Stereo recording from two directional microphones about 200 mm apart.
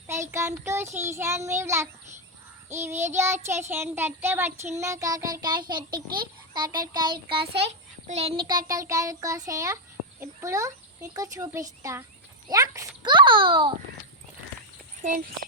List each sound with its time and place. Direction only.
0.1 s speech: 15° right (ahead or behind)
4.7 s child singing: 15° right (ahead or behind)
6.1 s a child's voice: 20° right (ahead or behind)
6.7 s child singing: 20° right (ahead or behind)
7.3 s a child's voice: 55° right (ahead or behind)
8.0 s a child's voice: 30° right (ahead or behind)